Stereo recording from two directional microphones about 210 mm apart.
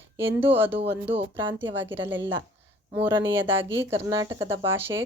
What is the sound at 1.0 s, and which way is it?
Speech, 25° right (ahead or behind).